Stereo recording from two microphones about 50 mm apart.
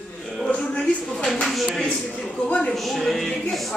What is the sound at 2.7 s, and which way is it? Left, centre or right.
Speech, centre.